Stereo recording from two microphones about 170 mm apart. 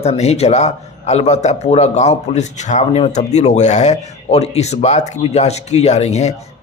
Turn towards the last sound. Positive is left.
turn(degrees=40)  # may be behind; listen again after turning